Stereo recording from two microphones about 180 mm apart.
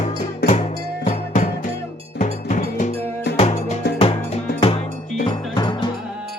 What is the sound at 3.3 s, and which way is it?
Music, 40° left (ahead or behind).